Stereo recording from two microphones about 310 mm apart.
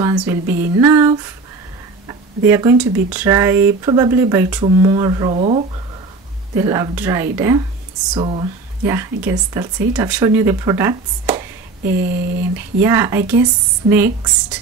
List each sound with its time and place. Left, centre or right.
0.0 s speech: centre
11.8 s a sound: right
12.8 s speech: centre